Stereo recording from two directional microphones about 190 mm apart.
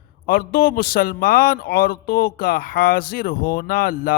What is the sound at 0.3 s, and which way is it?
A man's voice, 50° left (ahead or behind).